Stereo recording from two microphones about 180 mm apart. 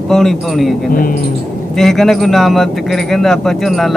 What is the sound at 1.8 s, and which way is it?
Speech, centre (ahead or behind).